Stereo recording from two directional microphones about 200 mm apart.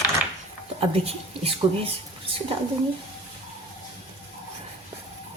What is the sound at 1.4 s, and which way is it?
Speech, 30° right (ahead or behind).